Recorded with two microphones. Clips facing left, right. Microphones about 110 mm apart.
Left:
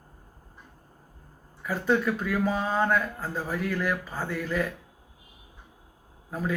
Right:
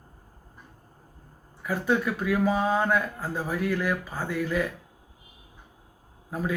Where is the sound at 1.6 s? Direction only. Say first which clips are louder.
Even; 10° right (ahead or behind).